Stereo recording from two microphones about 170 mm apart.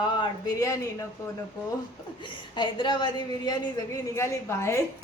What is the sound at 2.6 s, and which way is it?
A man's voice, 25° left (ahead or behind).